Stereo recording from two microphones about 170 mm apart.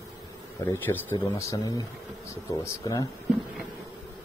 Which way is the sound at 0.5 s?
15° left (ahead or behind).